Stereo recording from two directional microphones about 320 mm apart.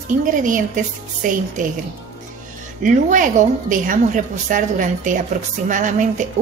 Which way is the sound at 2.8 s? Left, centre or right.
Right.